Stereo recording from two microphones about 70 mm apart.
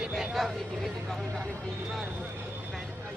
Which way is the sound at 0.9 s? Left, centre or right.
Centre.